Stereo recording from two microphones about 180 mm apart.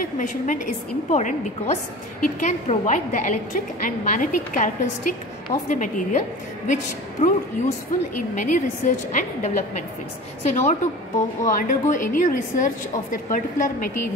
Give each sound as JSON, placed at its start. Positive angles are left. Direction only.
{"t": 0.2, "sound": "a woman's voice", "side_deg": 45}